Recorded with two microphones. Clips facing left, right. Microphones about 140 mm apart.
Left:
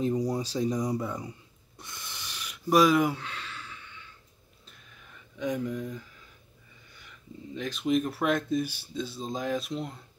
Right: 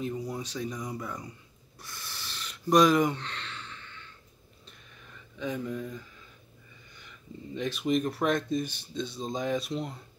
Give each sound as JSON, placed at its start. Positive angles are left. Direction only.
{"t": 0.0, "sound": "speech", "side_deg": 35}
{"t": 1.8, "sound": "a sound", "side_deg": 20}
{"t": 5.4, "sound": "speech", "side_deg": 10}
{"t": 7.5, "sound": "speech", "side_deg": 0}